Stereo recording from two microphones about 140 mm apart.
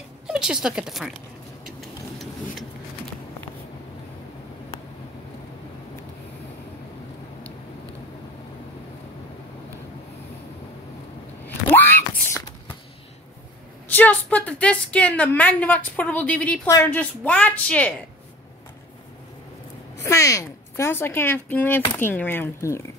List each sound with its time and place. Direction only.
0.3 s speech: 5° right (ahead or behind)
11.4 s a sound: 15° left (ahead or behind)
13.8 s a woman's voice: 10° left (ahead or behind)
16.6 s speech: 20° left (ahead or behind)
17.0 s a woman's voice: 10° left (ahead or behind)
20.0 s a woman's voice: 20° left (ahead or behind)